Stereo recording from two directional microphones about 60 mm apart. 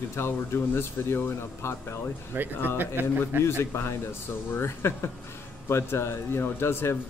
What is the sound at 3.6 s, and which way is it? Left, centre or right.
Speech, left.